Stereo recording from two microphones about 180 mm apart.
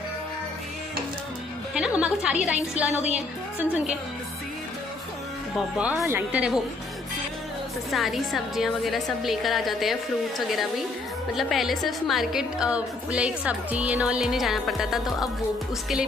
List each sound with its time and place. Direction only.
1.7 s a woman's voice: 5° right (ahead or behind)
5.8 s a woman's voice: 10° right (ahead or behind)
7.9 s a woman's voice: centre (ahead or behind)
11.3 s a woman's voice: centre (ahead or behind)